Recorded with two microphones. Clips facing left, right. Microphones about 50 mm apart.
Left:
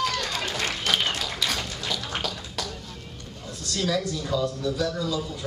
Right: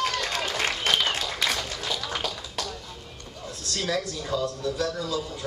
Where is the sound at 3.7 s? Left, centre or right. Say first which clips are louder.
Left 2 dB; centre.